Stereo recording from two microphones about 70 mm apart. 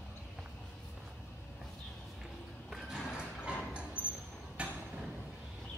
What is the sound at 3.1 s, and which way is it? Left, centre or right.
Music, centre.